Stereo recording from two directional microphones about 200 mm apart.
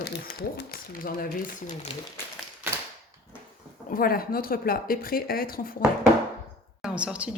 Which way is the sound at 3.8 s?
45° left (ahead or behind).